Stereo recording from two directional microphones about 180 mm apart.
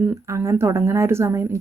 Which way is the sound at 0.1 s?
15° right (ahead or behind).